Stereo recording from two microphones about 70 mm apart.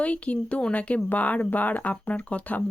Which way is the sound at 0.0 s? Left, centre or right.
Centre.